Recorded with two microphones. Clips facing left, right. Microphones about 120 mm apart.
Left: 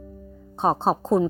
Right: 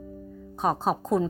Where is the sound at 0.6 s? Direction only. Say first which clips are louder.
Left 4 dB; 30° left (ahead or behind).